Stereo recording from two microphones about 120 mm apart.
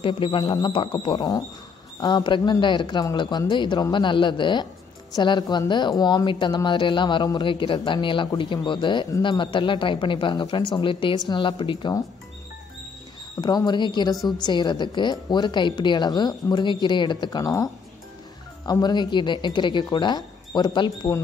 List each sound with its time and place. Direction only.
0.0 s a woman's voice: 45° left (ahead or behind)
13.4 s a woman's voice: 35° left (ahead or behind)
18.7 s a woman's voice: 35° left (ahead or behind)